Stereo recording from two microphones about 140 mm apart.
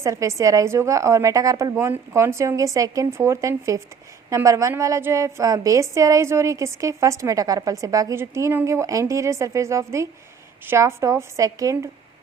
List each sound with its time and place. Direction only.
0.0 s a woman's voice: 20° right (ahead or behind)